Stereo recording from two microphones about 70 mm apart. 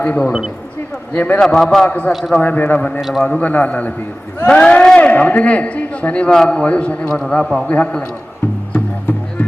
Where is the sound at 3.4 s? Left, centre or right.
Left.